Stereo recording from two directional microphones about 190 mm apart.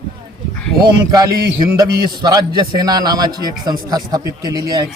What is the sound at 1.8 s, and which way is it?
A man's voice, 20° right (ahead or behind).